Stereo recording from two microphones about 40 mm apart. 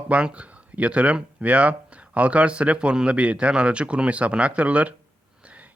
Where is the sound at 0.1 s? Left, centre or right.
Right.